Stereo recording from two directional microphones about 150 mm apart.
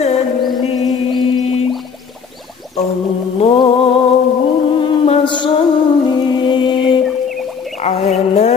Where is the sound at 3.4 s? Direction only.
35° left (ahead or behind).